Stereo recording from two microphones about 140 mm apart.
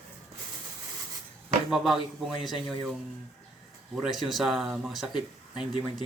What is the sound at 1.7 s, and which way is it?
Speech, centre (ahead or behind).